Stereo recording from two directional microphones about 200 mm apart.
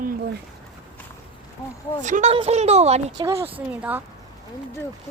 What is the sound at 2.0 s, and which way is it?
A woman's voice, 35° right (ahead or behind).